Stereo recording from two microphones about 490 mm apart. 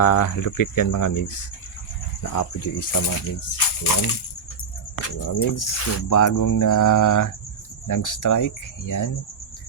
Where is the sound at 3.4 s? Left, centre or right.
Left.